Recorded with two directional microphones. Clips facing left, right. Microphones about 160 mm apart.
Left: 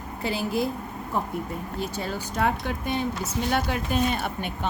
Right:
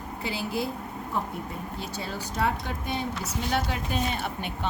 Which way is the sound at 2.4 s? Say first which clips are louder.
Left 3 dB; 55° left (ahead or behind).